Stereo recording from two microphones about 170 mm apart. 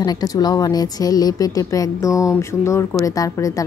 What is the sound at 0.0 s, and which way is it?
A woman's voice, 25° left (ahead or behind).